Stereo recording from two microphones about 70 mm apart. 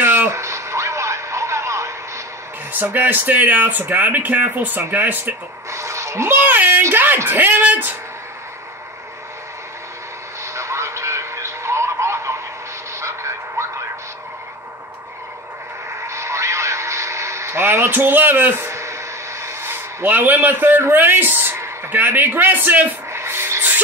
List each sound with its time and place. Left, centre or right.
0.0 s radio: right
2.7 s speech: right
5.7 s a sound: right
6.3 s speech: right
10.4 s radio: right
13.0 s a sound: right
16.1 s radio: right
23.1 s music: right